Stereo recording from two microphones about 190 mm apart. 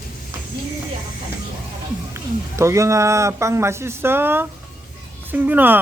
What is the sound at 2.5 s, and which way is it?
Speech, 15° right (ahead or behind).